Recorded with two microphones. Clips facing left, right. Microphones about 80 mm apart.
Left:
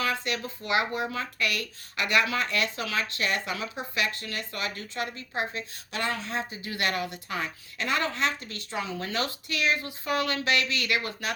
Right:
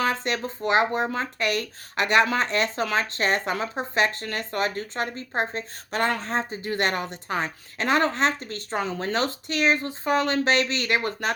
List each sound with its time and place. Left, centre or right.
0.0 s speech: right